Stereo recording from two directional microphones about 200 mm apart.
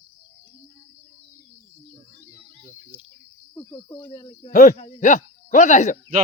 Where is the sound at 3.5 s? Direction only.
15° left (ahead or behind).